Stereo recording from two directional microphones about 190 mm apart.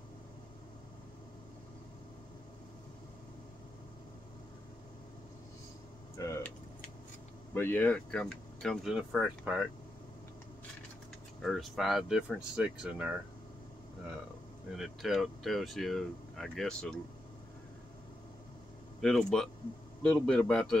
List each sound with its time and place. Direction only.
6.1 s a sound: 15° left (ahead or behind)
7.5 s speech: 10° left (ahead or behind); by 9.7 s 5° right (ahead or behind)
11.4 s speech: centre (ahead or behind)
14.7 s speech: centre (ahead or behind)
18.9 s speech: 5° left (ahead or behind)